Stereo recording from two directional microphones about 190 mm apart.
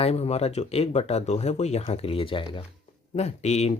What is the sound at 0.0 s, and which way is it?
Speech, 35° left (ahead or behind).